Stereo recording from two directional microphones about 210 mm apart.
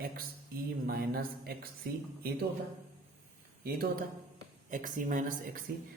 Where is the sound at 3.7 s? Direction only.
45° right (ahead or behind).